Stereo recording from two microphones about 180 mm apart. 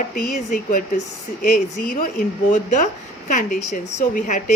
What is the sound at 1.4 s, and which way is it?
A woman's voice, 50° left (ahead or behind).